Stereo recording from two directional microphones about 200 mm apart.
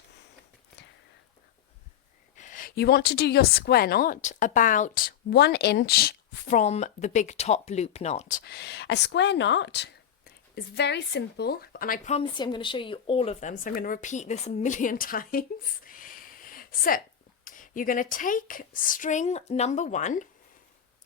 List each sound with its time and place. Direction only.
0.8 s whispering: 60° left (ahead or behind)
2.3 s a woman's voice: 40° left (ahead or behind)
12.3 s speech: 20° left (ahead or behind)